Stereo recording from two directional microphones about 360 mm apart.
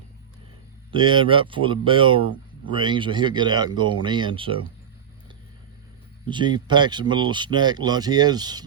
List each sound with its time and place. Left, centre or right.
0.9 s speech: centre
6.2 s speech: centre